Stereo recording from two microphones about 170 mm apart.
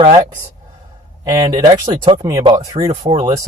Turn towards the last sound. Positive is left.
turn(degrees=-30)  # may be behind; listen again after turning